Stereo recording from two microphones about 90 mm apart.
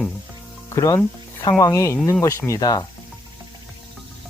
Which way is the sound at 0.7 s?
40° left (ahead or behind).